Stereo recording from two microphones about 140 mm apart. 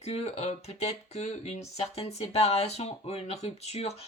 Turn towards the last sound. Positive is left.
turn(degrees=50)  # may be behind; listen again after turning